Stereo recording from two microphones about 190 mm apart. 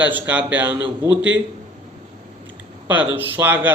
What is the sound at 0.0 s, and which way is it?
A man's voice, 10° right (ahead or behind).